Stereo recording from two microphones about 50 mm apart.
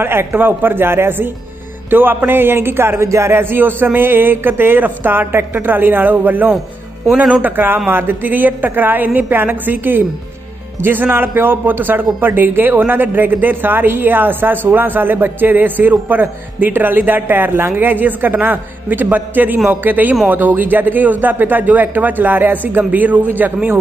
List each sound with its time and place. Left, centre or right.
0.0 s a man's voice: right
3.1 s speech: right
3.3 s a man's voice: right